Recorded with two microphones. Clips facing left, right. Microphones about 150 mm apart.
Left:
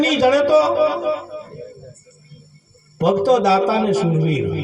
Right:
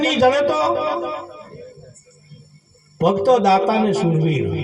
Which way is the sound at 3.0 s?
15° right (ahead or behind).